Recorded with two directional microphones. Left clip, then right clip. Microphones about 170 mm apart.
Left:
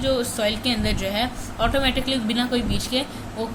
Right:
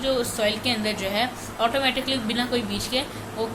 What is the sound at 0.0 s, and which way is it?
A woman's voice, 25° left (ahead or behind).